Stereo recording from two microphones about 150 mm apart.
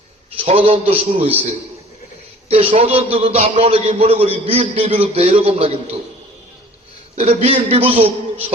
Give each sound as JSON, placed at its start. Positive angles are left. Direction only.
{"t": 0.3, "sound": "a man's voice", "side_deg": -40}
{"t": 2.5, "sound": "a man's voice", "side_deg": -40}
{"t": 7.2, "sound": "a man's voice", "side_deg": -40}